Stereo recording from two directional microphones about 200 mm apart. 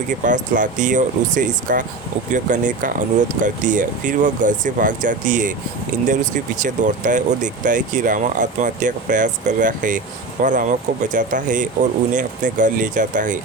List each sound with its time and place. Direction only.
0.3 s speech: 40° right (ahead or behind)